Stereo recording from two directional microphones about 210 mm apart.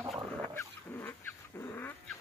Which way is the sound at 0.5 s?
10° left (ahead or behind).